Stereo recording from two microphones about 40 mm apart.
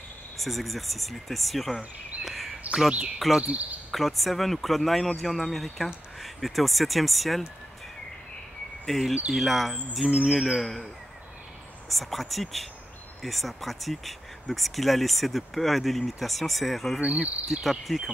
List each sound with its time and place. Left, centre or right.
0.4 s speech: centre
2.2 s a sound: centre
3.2 s speech: centre
8.8 s speech: centre
10.0 s a sound: right
10.3 s speech: centre
11.9 s speech: centre
17.0 s cricket: right
17.5 s speech: centre